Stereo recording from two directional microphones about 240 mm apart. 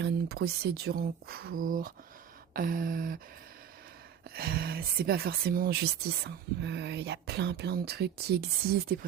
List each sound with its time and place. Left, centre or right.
0.0 s speech: right
4.4 s speech: right